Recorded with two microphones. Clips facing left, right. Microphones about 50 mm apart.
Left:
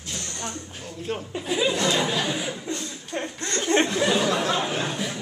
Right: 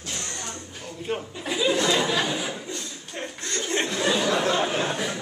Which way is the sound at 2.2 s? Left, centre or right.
Centre.